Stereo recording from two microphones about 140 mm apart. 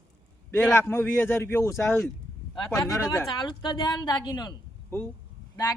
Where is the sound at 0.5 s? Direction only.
15° left (ahead or behind).